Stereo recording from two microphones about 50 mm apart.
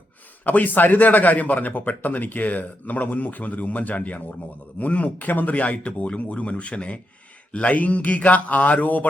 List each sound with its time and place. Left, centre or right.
0.4 s a man's voice: left